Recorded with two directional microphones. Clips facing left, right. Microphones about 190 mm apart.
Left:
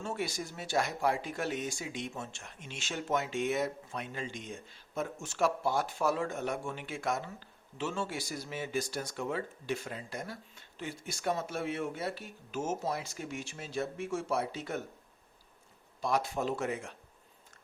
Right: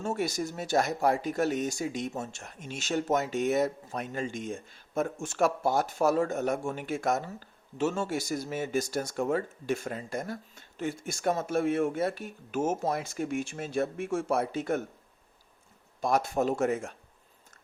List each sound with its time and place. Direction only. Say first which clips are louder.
0.0 s speech: right 6 dB; 45° right (ahead or behind)
16.0 s speech: right 5 dB; 45° right (ahead or behind)